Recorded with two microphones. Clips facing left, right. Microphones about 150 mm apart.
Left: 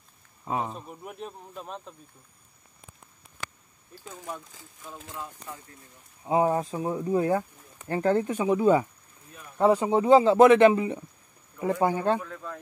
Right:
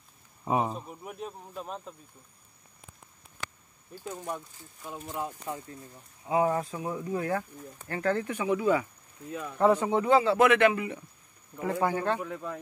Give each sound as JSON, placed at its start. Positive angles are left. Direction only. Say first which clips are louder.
{"t": 0.5, "sound": "speech", "louder": "right 3 dB", "side_deg": -15}
{"t": 0.7, "sound": "speech", "louder": "even", "side_deg": 0}
{"t": 5.1, "sound": "speech", "louder": "right 6 dB", "side_deg": -20}
{"t": 6.2, "sound": "speech", "louder": "left 2 dB", "side_deg": 30}
{"t": 9.3, "sound": "speech", "louder": "right 12 dB", "side_deg": -90}
{"t": 9.6, "sound": "speech", "louder": "left 2 dB", "side_deg": 15}
{"t": 9.8, "sound": "speech", "louder": "left 5 dB", "side_deg": 30}
{"t": 10.5, "sound": "speech", "louder": "left 6 dB", "side_deg": 25}
{"t": 12.2, "sound": "speech", "louder": "right 2 dB", "side_deg": -15}